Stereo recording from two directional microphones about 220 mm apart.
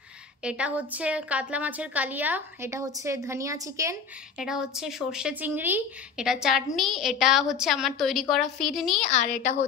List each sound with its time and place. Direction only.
0.4 s a woman's voice: 5° right (ahead or behind)
4.4 s speech: centre (ahead or behind)
9.1 s a woman's voice: 30° left (ahead or behind)